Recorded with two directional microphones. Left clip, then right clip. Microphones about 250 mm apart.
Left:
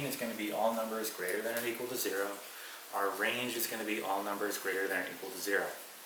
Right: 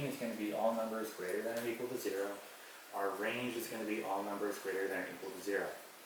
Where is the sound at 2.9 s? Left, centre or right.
Centre.